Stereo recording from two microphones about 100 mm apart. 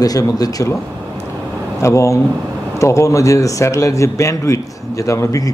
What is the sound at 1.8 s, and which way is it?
Speech, 30° left (ahead or behind).